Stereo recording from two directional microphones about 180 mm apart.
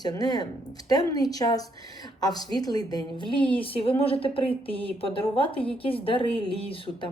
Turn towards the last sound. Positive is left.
turn(degrees=30)  # may be behind; listen again after turning